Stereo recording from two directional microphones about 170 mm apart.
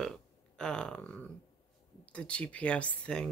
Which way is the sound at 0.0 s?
5° left (ahead or behind).